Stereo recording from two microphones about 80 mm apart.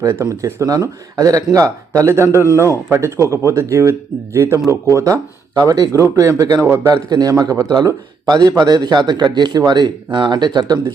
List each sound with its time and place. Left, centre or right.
0.2 s speech: right
8.3 s speech: right